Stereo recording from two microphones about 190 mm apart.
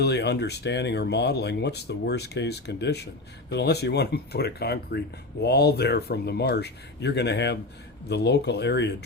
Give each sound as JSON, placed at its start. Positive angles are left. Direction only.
{"t": 0.0, "sound": "speech", "side_deg": 60}